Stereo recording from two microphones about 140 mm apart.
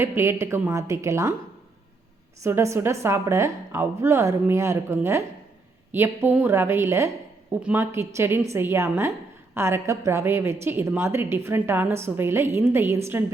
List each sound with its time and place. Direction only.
0.0 s a woman's voice: 20° right (ahead or behind)
2.4 s a woman's voice: 20° right (ahead or behind)